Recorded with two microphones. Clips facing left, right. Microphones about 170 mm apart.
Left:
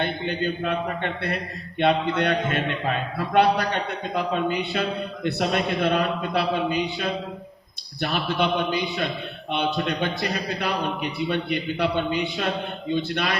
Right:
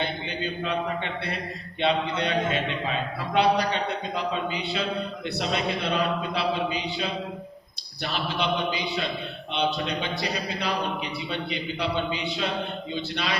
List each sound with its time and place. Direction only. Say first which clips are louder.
0.0 s a man's voice: left 4 dB; 55° left (ahead or behind)